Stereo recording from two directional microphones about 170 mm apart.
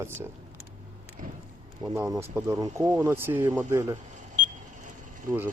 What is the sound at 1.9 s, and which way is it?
Speech, 15° right (ahead or behind).